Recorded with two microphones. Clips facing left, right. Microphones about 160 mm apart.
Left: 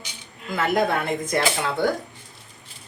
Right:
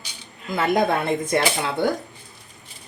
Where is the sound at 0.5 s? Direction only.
25° right (ahead or behind).